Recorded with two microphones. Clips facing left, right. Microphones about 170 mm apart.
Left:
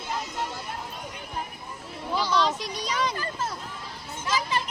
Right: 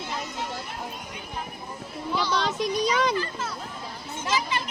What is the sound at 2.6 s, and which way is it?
Speech, 60° right (ahead or behind).